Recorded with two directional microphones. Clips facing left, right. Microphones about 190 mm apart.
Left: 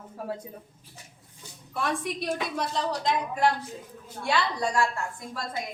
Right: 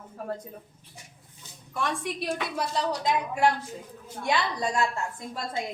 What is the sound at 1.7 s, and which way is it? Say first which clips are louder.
A woman's voice: left 1 dB; centre (ahead or behind).